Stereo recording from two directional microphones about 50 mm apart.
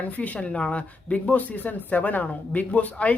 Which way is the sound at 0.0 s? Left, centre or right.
Left.